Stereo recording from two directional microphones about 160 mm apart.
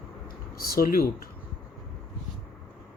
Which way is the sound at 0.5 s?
70° left (ahead or behind).